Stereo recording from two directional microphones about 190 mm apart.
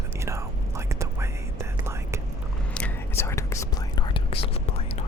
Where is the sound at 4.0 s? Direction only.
25° left (ahead or behind).